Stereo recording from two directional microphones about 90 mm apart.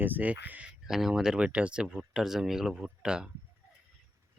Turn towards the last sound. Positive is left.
turn(degrees=-10)  # may be behind; listen again after turning